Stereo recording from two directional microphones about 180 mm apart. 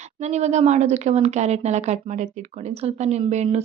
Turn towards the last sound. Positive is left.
turn(degrees=-35)  # may be behind; listen again after turning